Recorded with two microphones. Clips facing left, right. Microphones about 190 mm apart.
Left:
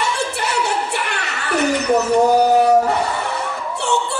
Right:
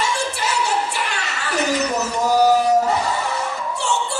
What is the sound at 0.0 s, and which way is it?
Music, 60° left (ahead or behind).